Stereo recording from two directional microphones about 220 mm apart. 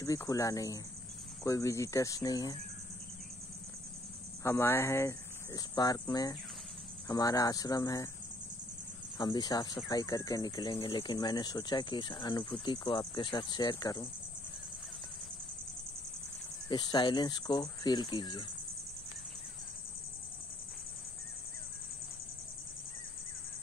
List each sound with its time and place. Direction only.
0.0 s speech: 15° left (ahead or behind)
4.4 s speech: 10° left (ahead or behind)
9.2 s speech: 20° left (ahead or behind)
16.6 s speech: 20° left (ahead or behind)